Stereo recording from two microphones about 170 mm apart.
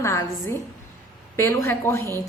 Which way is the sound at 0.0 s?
15° left (ahead or behind).